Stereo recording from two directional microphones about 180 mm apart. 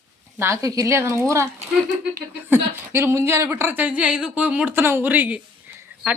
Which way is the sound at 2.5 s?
15° right (ahead or behind).